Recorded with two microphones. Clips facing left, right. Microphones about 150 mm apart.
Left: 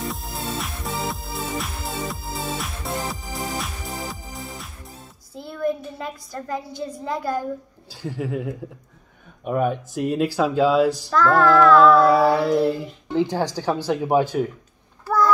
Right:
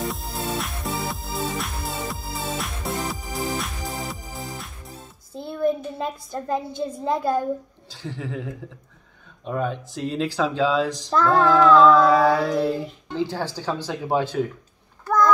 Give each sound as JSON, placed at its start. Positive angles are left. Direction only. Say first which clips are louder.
{"t": 0.0, "sound": "music", "louder": "right 1 dB", "side_deg": 0}
{"t": 5.3, "sound": "a child's voice", "louder": "right 2 dB", "side_deg": -25}
{"t": 7.9, "sound": "speech", "louder": "left 4 dB", "side_deg": 10}
{"t": 11.1, "sound": "female singing", "louder": "right 2 dB", "side_deg": -20}
{"t": 11.9, "sound": "speech", "louder": "left 1 dB", "side_deg": 10}
{"t": 15.0, "sound": "a sound", "louder": "right 1 dB", "side_deg": 5}